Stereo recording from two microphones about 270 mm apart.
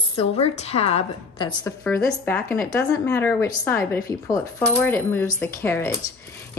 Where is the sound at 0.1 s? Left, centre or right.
Left.